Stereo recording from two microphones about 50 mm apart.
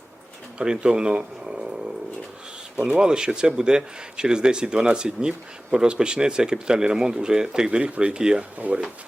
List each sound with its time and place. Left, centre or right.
0.6 s speech: centre
8.5 s speech: right